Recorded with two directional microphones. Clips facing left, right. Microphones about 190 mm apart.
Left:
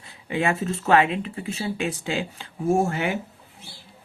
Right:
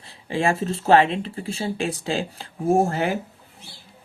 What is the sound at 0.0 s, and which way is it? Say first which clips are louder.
Speech: right 2 dB; 30° right (ahead or behind).